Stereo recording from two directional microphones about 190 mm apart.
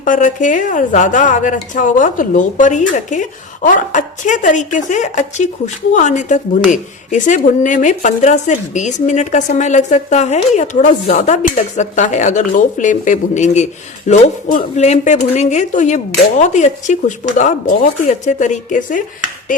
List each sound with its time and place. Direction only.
0.0 s a woman's voice: 45° left (ahead or behind)